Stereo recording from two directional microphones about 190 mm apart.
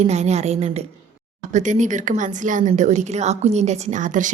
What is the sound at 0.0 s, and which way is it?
A woman's voice, 35° right (ahead or behind).